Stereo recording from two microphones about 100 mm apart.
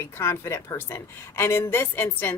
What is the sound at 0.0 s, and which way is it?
A woman's voice, 25° left (ahead or behind).